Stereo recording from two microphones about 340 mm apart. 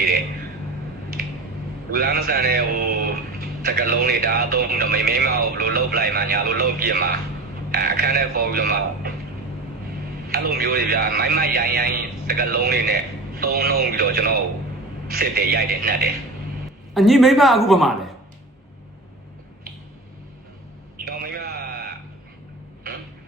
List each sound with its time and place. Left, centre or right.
1.2 s squish: right
1.9 s speech: right
10.2 s speech: right
16.9 s speech: centre
21.0 s a sound: right